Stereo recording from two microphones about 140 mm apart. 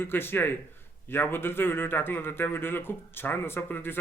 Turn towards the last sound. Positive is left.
turn(degrees=15)  # may be behind; listen again after turning